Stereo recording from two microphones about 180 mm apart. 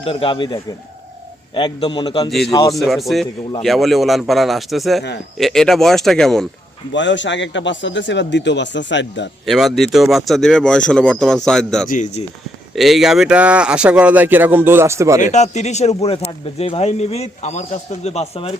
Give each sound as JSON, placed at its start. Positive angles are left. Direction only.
{"t": 0.0, "sound": "a man's voice", "side_deg": 30}
{"t": 2.7, "sound": "speech", "side_deg": 0}
{"t": 6.9, "sound": "a man's voice", "side_deg": 90}
{"t": 9.5, "sound": "speech", "side_deg": 0}
{"t": 11.9, "sound": "speech", "side_deg": 45}
{"t": 12.7, "sound": "speech", "side_deg": 0}
{"t": 15.2, "sound": "speech", "side_deg": 40}